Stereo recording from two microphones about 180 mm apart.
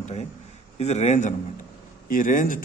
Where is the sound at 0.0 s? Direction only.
40° left (ahead or behind).